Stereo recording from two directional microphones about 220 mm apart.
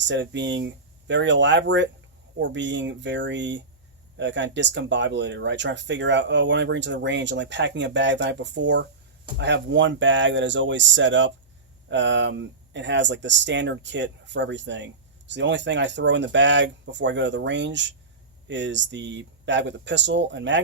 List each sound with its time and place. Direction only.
0.1 s speech: 55° right (ahead or behind)